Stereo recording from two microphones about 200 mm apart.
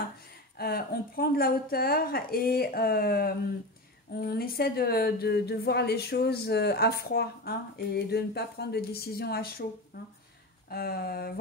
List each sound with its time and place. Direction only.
0.6 s a woman's voice: 50° left (ahead or behind)
10.7 s a woman's voice: 50° left (ahead or behind)